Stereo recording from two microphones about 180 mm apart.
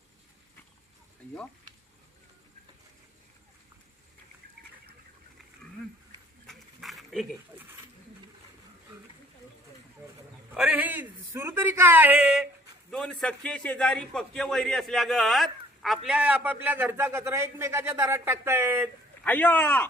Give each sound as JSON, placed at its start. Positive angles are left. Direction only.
{"t": 6.4, "sound": "dog", "side_deg": 0}
{"t": 10.5, "sound": "a man's voice", "side_deg": -5}
{"t": 19.2, "sound": "speech", "side_deg": 10}